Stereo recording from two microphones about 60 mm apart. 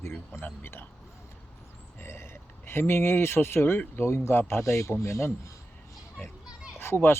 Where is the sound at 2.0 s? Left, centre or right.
Left.